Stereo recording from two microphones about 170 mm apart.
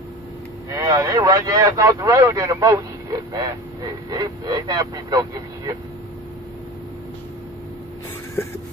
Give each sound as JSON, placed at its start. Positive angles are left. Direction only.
{"t": 0.7, "sound": "a man's voice", "side_deg": -20}